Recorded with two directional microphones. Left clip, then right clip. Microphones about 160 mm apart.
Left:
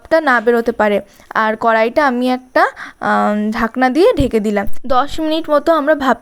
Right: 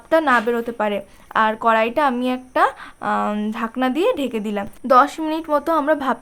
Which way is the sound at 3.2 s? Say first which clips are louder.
Left 7 dB; 20° left (ahead or behind).